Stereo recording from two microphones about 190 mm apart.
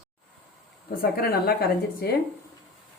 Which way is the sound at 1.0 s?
50° left (ahead or behind).